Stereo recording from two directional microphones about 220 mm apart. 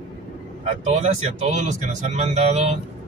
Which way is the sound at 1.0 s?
30° right (ahead or behind).